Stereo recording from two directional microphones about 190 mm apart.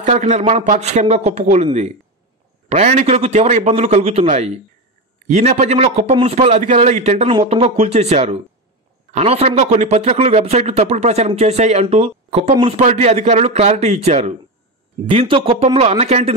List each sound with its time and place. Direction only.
0.0 s a man's voice: 40° right (ahead or behind)